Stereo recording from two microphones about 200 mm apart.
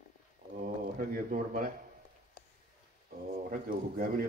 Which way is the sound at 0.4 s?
30° right (ahead or behind).